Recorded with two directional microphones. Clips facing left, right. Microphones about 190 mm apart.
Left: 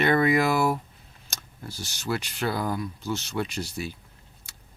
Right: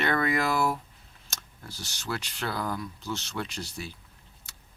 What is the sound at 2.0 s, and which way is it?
A man's voice, 10° left (ahead or behind).